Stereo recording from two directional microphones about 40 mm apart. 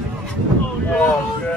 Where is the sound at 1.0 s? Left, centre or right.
Left.